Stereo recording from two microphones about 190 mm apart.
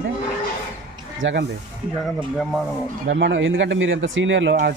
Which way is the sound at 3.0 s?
65° right (ahead or behind).